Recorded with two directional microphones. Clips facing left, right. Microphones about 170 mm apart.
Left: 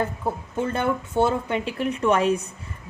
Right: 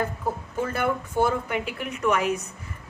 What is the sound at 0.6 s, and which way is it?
Speech, 25° left (ahead or behind).